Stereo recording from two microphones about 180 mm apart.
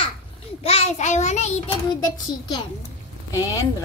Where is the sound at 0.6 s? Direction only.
35° left (ahead or behind).